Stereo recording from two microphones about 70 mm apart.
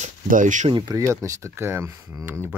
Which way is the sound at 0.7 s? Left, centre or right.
Right.